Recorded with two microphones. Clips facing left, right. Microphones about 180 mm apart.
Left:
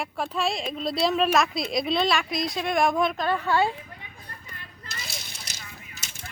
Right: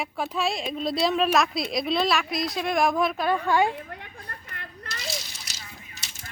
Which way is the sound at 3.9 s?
65° right (ahead or behind).